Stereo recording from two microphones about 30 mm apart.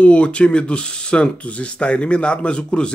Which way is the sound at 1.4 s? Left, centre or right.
Left.